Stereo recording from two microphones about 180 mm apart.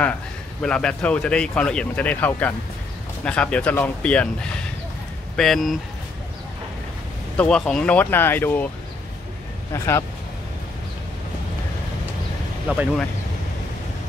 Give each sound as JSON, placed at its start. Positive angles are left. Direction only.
{"t": 0.6, "sound": "speech", "side_deg": 5}
{"t": 5.3, "sound": "speech", "side_deg": 0}
{"t": 7.3, "sound": "speech", "side_deg": 5}
{"t": 9.7, "sound": "speech", "side_deg": 15}
{"t": 12.6, "sound": "speech", "side_deg": -5}